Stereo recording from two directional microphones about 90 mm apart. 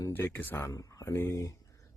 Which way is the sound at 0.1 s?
25° left (ahead or behind).